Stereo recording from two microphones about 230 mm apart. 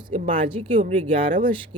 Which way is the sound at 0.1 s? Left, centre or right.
Right.